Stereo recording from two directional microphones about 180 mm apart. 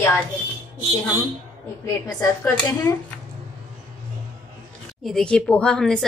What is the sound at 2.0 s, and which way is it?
Speech, 15° left (ahead or behind).